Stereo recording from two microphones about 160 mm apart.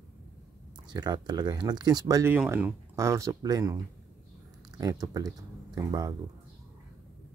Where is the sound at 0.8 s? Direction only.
25° right (ahead or behind).